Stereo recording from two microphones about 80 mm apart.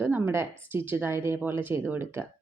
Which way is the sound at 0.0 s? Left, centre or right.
Right.